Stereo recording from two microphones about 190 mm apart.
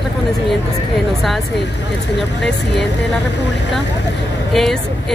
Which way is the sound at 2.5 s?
65° left (ahead or behind).